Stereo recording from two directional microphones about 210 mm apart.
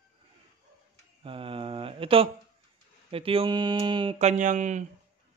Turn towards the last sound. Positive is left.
turn(degrees=-35)  # may be behind; listen again after turning